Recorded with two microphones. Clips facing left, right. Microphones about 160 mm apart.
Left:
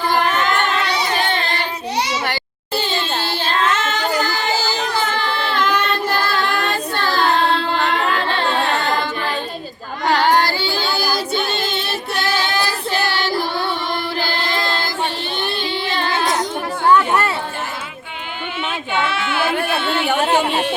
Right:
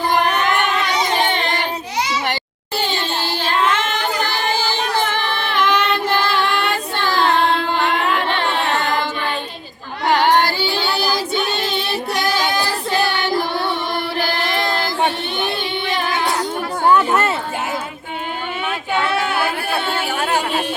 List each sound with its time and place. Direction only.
0.1 s music: 15° right (ahead or behind)
3.8 s a sound: 90° left
12.2 s child singing: 15° right (ahead or behind)
15.9 s music: 15° right (ahead or behind)
16.9 s chatter: 20° right (ahead or behind)
19.1 s a sound: 40° right (ahead or behind)